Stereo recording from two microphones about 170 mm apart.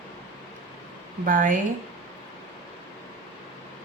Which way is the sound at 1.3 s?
50° right (ahead or behind).